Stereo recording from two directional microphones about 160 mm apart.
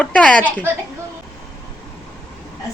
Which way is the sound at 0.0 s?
5° left (ahead or behind).